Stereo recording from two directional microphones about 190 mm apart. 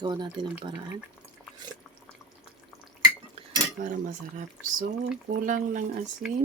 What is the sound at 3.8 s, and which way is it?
Speech, 40° right (ahead or behind).